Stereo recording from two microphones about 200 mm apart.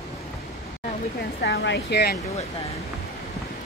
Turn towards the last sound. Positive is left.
turn(degrees=55)  # may be behind; listen again after turning